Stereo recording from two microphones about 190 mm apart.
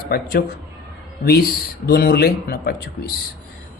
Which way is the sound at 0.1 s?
55° left (ahead or behind).